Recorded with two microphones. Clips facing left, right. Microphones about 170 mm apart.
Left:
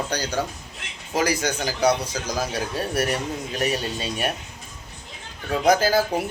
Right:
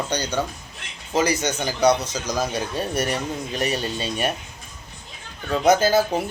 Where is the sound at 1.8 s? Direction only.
10° left (ahead or behind).